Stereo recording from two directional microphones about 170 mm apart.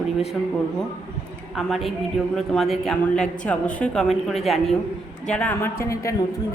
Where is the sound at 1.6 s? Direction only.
Centre (ahead or behind); by 6.3 s 20° left (ahead or behind).